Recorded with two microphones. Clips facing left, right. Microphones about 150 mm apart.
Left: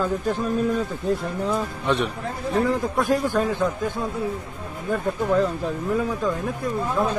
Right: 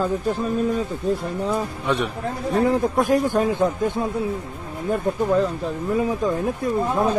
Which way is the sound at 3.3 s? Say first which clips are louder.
Right 3 dB; 20° right (ahead or behind).